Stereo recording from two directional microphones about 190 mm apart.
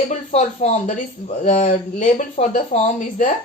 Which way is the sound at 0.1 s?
35° left (ahead or behind).